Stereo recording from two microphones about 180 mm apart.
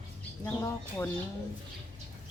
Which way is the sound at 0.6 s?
15° left (ahead or behind).